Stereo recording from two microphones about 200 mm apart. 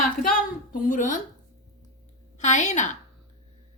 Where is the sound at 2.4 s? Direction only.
35° left (ahead or behind).